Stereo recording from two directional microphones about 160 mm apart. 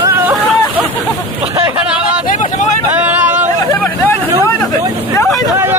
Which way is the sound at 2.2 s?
55° left (ahead or behind).